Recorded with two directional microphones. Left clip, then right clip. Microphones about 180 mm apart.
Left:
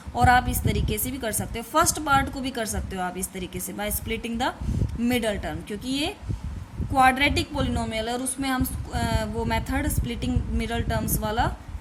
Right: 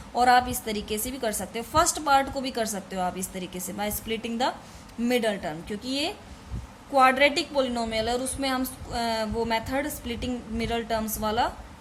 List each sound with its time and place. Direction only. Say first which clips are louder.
0.1 s a woman's voice: even; 15° left (ahead or behind)